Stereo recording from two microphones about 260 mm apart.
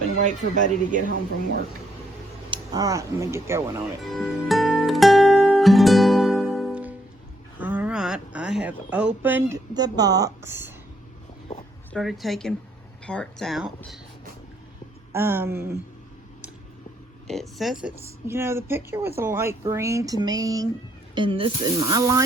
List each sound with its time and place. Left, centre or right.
0.2 s speech: right
2.5 s speech: centre
4.0 s music: centre
7.6 s speech: centre
11.9 s speech: centre
15.1 s a woman's voice: centre
17.2 s a woman's voice: centre